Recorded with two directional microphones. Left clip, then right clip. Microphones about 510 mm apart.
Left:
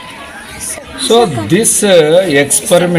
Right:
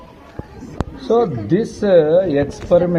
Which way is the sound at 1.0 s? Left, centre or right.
Right.